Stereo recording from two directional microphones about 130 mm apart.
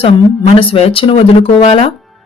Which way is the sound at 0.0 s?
45° left (ahead or behind).